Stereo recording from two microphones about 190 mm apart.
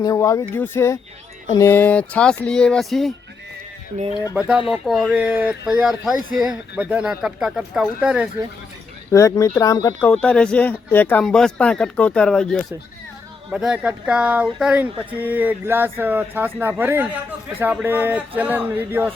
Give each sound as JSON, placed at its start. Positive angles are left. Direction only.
{"t": 0.0, "sound": "speech", "side_deg": 15}
{"t": 4.1, "sound": "speech", "side_deg": 20}
{"t": 4.4, "sound": "speech", "side_deg": -5}
{"t": 9.1, "sound": "speech", "side_deg": 15}
{"t": 10.1, "sound": "speech", "side_deg": 5}